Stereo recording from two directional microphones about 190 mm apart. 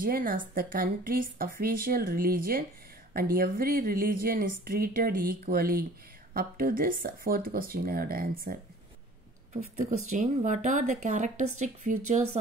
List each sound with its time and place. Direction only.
0.0 s speech: 45° right (ahead or behind)
9.6 s speech: 45° right (ahead or behind)